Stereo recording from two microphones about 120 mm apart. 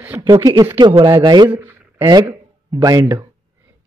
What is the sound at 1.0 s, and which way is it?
Speech, 45° right (ahead or behind).